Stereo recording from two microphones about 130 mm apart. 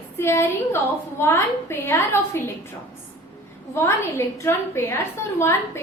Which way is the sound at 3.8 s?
20° left (ahead or behind).